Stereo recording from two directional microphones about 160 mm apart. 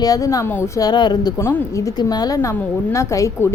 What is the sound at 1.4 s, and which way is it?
A woman's voice, 15° left (ahead or behind).